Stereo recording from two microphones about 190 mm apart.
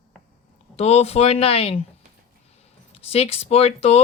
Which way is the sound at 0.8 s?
35° left (ahead or behind).